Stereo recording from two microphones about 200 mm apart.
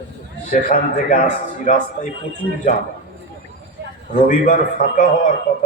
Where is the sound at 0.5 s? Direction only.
40° left (ahead or behind).